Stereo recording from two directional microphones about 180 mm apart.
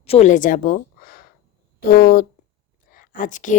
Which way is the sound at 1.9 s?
55° left (ahead or behind).